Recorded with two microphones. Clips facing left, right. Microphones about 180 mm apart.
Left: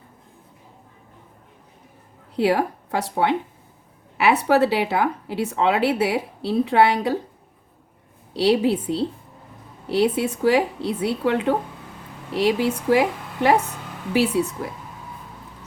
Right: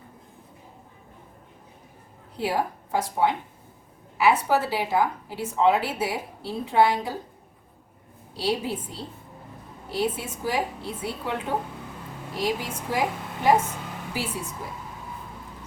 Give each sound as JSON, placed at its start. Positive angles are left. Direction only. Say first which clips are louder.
{"t": 2.3, "sound": "a woman's voice", "louder": "left 7 dB", "side_deg": 70}
{"t": 8.3, "sound": "a woman's voice", "louder": "left 9 dB", "side_deg": 70}